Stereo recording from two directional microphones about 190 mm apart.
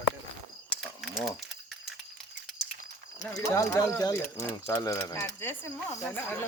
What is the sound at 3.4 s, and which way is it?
Speech, 15° left (ahead or behind).